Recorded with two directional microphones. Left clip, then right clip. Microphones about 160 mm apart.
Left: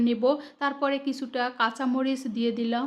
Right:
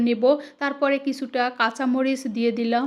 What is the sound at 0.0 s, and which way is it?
Speech, 20° right (ahead or behind).